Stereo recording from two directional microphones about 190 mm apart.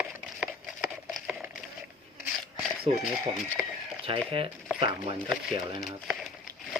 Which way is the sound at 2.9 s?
35° right (ahead or behind).